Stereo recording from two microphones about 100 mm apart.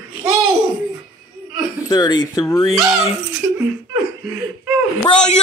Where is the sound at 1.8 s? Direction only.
45° left (ahead or behind).